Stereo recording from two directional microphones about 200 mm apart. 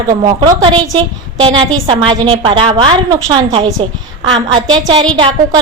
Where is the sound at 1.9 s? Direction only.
25° right (ahead or behind).